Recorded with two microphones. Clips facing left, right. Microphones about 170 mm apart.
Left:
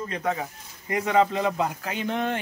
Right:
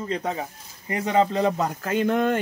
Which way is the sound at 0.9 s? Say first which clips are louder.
Even; 35° right (ahead or behind).